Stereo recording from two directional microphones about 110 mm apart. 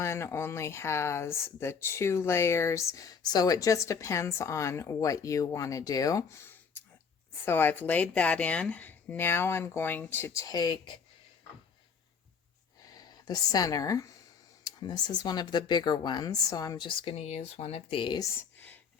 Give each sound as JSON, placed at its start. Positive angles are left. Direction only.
{"t": 0.0, "sound": "speech", "side_deg": 25}
{"t": 10.4, "sound": "speech", "side_deg": 35}
{"t": 12.9, "sound": "speech", "side_deg": 35}